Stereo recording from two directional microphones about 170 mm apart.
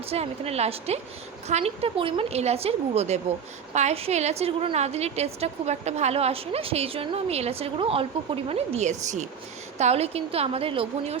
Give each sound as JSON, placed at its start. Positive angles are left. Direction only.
{"t": 0.1, "sound": "a woman's voice", "side_deg": -35}